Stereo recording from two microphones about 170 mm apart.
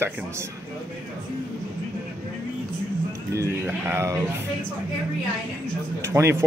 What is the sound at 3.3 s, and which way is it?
Speech, 15° right (ahead or behind).